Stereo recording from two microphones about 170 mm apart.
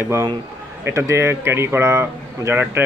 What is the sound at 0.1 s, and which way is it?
A man's voice, 20° right (ahead or behind).